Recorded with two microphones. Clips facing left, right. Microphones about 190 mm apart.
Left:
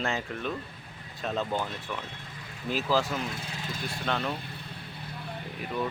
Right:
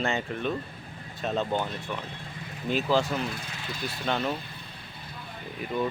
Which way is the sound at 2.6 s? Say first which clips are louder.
Right 2 dB; centre (ahead or behind).